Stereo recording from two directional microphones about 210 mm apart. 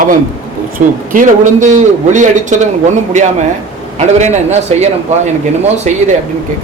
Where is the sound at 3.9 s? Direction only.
35° right (ahead or behind).